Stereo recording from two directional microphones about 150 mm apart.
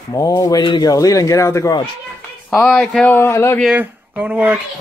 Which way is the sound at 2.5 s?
5° left (ahead or behind).